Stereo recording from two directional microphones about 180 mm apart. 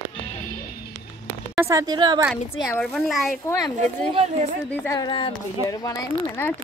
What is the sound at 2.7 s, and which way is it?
Speech, 5° left (ahead or behind).